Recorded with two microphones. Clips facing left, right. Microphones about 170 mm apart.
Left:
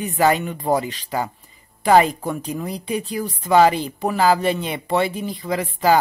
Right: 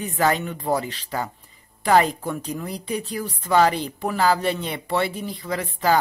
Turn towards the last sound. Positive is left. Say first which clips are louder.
# left 4 dB
turn(degrees=10)  # may be behind; listen again after turning